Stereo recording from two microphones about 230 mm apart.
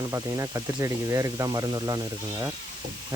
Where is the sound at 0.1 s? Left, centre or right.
Centre.